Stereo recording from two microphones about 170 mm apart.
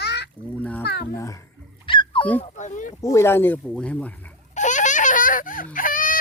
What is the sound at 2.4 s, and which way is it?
Speech, 45° left (ahead or behind).